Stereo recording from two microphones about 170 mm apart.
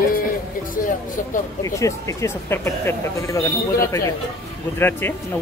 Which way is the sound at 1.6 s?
20° left (ahead or behind).